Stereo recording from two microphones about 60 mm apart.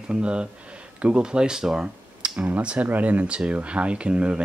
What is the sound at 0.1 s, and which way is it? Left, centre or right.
Speech, centre.